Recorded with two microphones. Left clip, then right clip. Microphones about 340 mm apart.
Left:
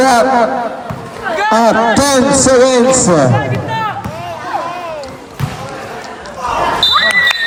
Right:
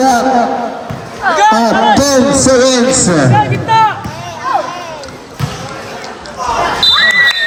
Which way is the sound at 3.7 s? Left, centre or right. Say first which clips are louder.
Right 9 dB; right.